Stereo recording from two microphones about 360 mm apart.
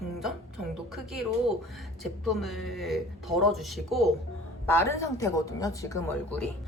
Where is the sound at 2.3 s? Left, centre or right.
Centre.